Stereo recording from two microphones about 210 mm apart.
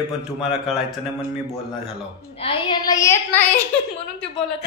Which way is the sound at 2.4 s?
20° left (ahead or behind).